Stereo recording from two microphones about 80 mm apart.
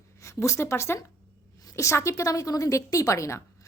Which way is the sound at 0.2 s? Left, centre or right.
Left.